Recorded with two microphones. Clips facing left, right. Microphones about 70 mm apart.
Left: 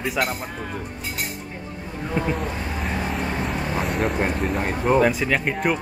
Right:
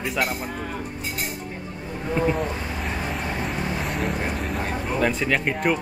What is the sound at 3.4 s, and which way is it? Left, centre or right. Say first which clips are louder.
Vehicle: left 2 dB; centre.